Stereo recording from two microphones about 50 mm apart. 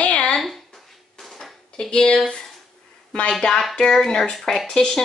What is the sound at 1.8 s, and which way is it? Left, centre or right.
A woman's voice, centre.